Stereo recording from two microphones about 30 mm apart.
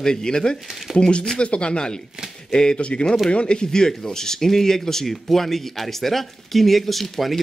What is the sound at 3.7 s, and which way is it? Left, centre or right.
Speech, centre.